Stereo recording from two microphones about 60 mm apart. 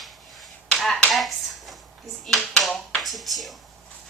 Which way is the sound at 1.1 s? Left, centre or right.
Centre.